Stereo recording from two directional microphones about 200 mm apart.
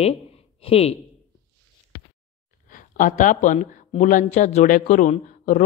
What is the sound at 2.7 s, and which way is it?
Speech, 40° left (ahead or behind).